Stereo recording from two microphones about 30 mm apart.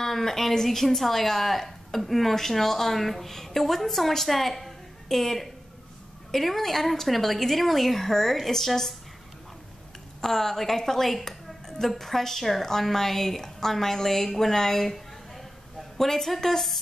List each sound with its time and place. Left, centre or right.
0.0 s speech: centre
10.2 s speech: centre